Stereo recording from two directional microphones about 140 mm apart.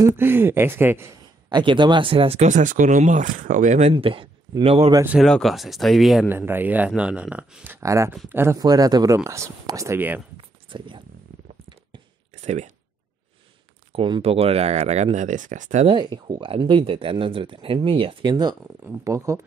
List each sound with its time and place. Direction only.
0.0 s speech: 15° right (ahead or behind)
1.5 s speech: 35° right (ahead or behind)
2.4 s speech: 65° right (ahead or behind)
3.9 s a man's voice: 40° right (ahead or behind)
5.2 s speech: centre (ahead or behind)
6.2 s speech: 15° right (ahead or behind)
8.5 s speech: 25° right (ahead or behind)
10.3 s a sound: 35° right (ahead or behind)
12.3 s a sound: 55° right (ahead or behind)
13.9 s speech: 40° right (ahead or behind); by 15.9 s 60° right (ahead or behind)
15.9 s speech: 35° right (ahead or behind)